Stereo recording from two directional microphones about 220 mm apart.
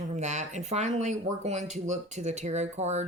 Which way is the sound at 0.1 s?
30° right (ahead or behind).